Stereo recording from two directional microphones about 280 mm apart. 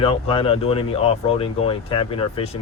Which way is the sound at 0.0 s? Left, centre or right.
Centre.